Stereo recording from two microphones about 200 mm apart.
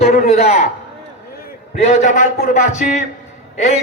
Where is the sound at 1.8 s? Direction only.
35° left (ahead or behind).